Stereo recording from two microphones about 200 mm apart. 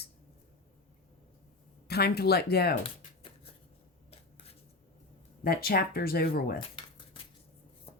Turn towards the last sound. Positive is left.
turn(degrees=50)  # may be behind; listen again after turning